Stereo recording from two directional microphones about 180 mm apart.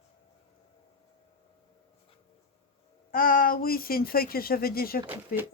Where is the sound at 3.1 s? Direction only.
55° left (ahead or behind).